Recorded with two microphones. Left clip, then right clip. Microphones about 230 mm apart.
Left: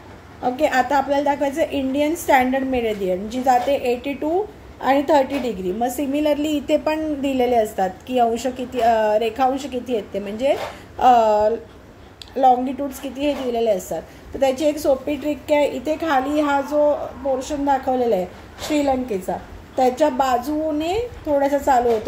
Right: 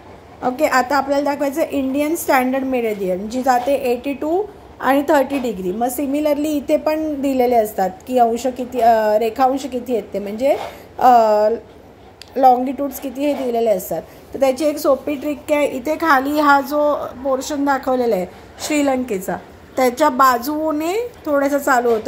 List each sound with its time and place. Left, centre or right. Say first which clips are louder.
0.8 s a woman's voice: right 1 dB; right